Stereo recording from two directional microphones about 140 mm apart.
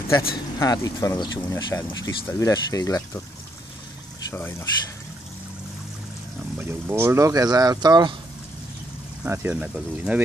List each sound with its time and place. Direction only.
0.6 s speech: 25° left (ahead or behind)
4.3 s speech: 20° left (ahead or behind)
6.6 s speech: 15° right (ahead or behind)
9.2 s speech: 15° right (ahead or behind)